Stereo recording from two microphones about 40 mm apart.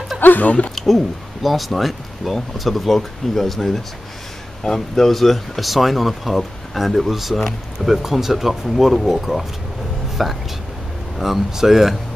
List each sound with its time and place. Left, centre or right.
0.2 s speech: left
0.7 s speech: centre